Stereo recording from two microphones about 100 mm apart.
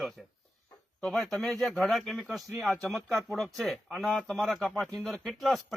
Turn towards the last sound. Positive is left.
turn(degrees=0)  # may be behind; listen again after turning